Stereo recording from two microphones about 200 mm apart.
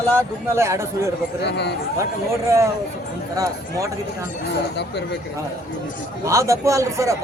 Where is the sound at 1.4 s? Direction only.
60° left (ahead or behind).